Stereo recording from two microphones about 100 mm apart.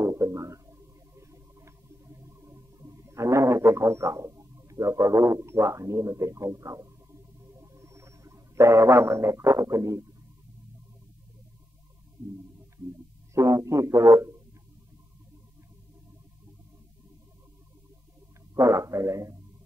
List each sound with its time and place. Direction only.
0.0 s a sound: 25° right (ahead or behind)
4.4 s speech: 35° right (ahead or behind)
13.3 s a man's voice: 30° right (ahead or behind)
18.5 s a man's voice: 30° right (ahead or behind)